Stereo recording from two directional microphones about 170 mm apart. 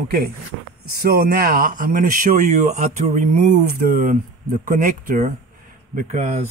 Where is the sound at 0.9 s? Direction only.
65° right (ahead or behind).